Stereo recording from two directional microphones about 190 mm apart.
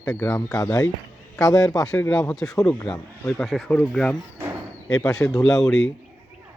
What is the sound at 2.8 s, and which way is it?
Speech, 5° left (ahead or behind).